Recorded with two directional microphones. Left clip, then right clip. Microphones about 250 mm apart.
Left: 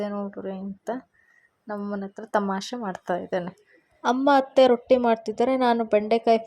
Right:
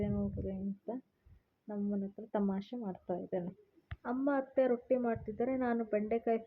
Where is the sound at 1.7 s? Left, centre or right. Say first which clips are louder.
Left 9 dB; centre.